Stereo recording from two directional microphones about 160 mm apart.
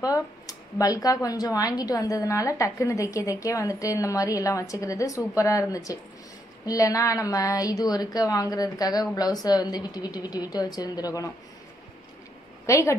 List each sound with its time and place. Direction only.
0.0 s speech: 20° left (ahead or behind)
12.6 s a woman's voice: 20° left (ahead or behind)